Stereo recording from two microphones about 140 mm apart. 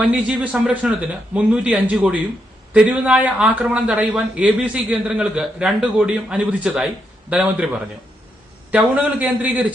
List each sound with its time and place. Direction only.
0.0 s a man's voice: 10° right (ahead or behind)
8.7 s a man's voice: 10° right (ahead or behind)